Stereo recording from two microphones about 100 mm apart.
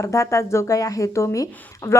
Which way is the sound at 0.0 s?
30° left (ahead or behind).